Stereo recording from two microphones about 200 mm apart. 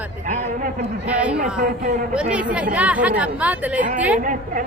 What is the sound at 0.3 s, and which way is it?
Speech, 40° right (ahead or behind).